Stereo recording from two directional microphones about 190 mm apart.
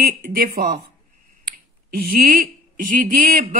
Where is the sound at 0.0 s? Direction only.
45° right (ahead or behind).